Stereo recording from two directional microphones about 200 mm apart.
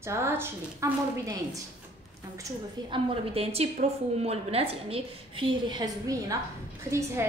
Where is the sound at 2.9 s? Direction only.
30° right (ahead or behind).